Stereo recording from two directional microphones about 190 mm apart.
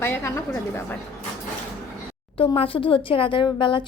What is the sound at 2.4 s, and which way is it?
A woman's voice, 30° left (ahead or behind).